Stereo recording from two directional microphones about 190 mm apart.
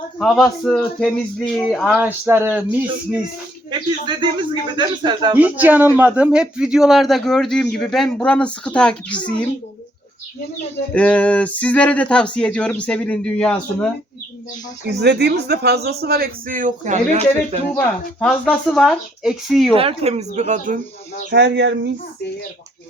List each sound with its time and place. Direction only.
0.2 s speech: centre (ahead or behind)
3.7 s speech: 25° right (ahead or behind)
5.3 s speech: 10° right (ahead or behind); by 9.5 s 5° left (ahead or behind)
10.9 s speech: 5° left (ahead or behind)
15.0 s speech: 60° right (ahead or behind); by 17.6 s 35° right (ahead or behind)
17.7 s speech: 5° left (ahead or behind)
19.7 s speech: 30° right (ahead or behind)
21.2 s speech: 60° right (ahead or behind)